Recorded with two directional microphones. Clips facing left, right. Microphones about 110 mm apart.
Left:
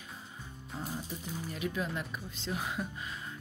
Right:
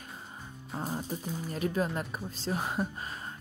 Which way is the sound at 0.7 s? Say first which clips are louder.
Right 5 dB; 40° right (ahead or behind).